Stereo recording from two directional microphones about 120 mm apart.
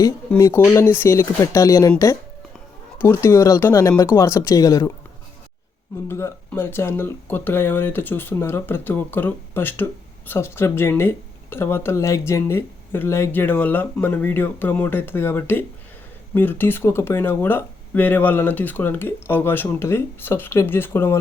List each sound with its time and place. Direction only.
0.3 s speech: 25° left (ahead or behind)
3.0 s speech: 25° left (ahead or behind)
6.1 s speech: 20° left (ahead or behind)